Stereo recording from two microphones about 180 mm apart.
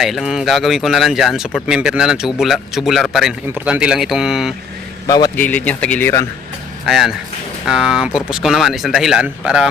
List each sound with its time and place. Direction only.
0.0 s speech: centre (ahead or behind)
5.0 s a man's voice: 20° left (ahead or behind)
5.4 s speech: 10° left (ahead or behind)
6.8 s speech: centre (ahead or behind)